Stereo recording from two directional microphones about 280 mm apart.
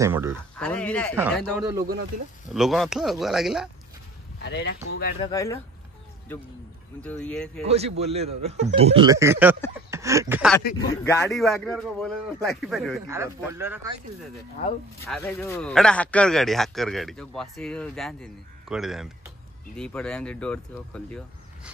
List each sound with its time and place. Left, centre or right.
0.0 s speech: centre
0.6 s a man's voice: centre
4.4 s speech: left
5.2 s speech: centre
7.0 s a man's voice: centre
7.6 s speech: right
9.8 s a sound: centre
11.1 s a man's voice: centre
15.0 s a man's voice: centre